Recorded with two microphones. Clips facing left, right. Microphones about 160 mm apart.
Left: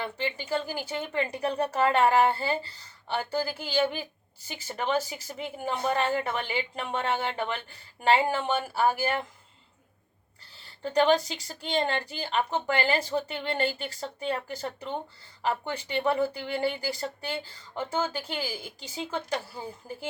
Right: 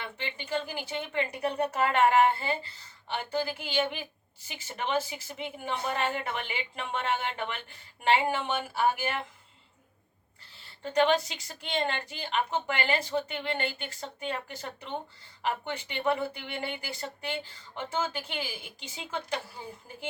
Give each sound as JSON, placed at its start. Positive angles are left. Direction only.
{"t": 0.0, "sound": "speech", "side_deg": 40}
{"t": 10.8, "sound": "speech", "side_deg": 35}